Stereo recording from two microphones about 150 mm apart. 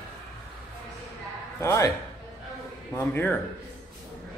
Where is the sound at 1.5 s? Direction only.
20° left (ahead or behind).